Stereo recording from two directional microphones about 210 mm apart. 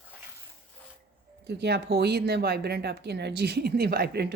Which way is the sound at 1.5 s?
50° right (ahead or behind).